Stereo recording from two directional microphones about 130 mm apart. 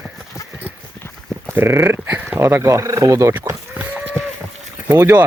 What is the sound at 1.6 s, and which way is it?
Speech, 20° right (ahead or behind).